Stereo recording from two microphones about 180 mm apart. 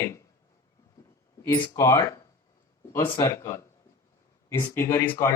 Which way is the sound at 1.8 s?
15° left (ahead or behind).